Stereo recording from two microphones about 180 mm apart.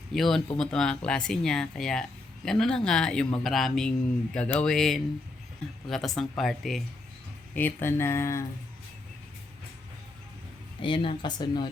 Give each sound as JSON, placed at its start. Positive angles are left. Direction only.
{"t": 0.1, "sound": "speech", "side_deg": 0}
{"t": 7.5, "sound": "speech", "side_deg": 10}
{"t": 10.8, "sound": "speech", "side_deg": 30}